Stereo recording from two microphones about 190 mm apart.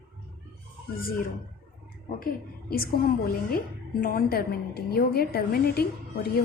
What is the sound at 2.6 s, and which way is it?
A woman's voice, 50° left (ahead or behind).